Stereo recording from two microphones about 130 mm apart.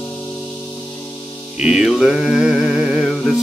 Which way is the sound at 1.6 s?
5° right (ahead or behind).